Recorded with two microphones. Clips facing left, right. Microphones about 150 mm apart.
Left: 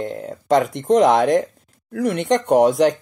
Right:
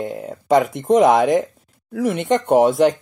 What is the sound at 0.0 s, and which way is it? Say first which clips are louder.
Speech: even; 5° right (ahead or behind).